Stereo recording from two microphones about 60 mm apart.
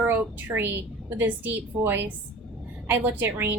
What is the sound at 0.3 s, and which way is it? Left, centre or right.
A woman's voice, right.